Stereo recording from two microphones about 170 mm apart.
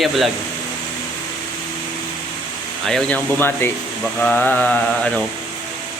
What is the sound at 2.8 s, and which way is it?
Mantra, 5° left (ahead or behind).